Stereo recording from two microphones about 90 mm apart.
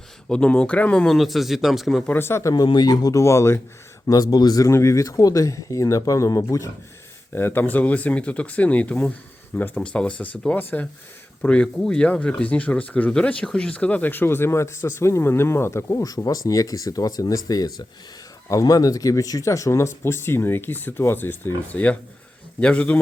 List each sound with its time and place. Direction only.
0.3 s speech: 10° left (ahead or behind)
2.0 s speech: 25° left (ahead or behind)
2.6 s speech: 50° left (ahead or behind); by 3.6 s 30° left (ahead or behind)
4.0 s speech: 45° left (ahead or behind)
4.7 s speech: 35° left (ahead or behind)
7.3 s speech: 25° left (ahead or behind)